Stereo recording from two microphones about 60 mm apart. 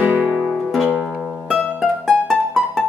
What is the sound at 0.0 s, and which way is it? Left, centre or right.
Music, right.